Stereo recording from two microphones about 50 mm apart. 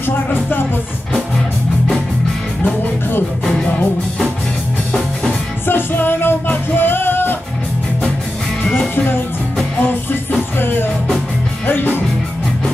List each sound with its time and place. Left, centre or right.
0.0 s music: left
2.6 s music: left
5.7 s music: left
8.9 s music: left
10.6 s music: left